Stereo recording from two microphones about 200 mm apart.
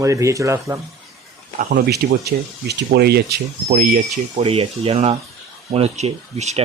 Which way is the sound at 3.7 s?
35° right (ahead or behind).